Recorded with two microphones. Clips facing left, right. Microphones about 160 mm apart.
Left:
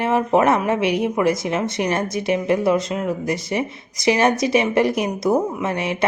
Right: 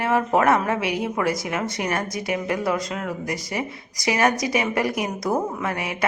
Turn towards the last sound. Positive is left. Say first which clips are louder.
# left 4 dB
turn(degrees=25)  # may be behind; listen again after turning